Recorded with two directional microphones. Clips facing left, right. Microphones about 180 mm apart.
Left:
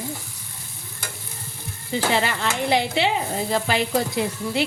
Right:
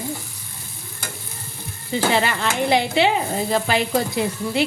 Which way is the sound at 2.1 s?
60° right (ahead or behind).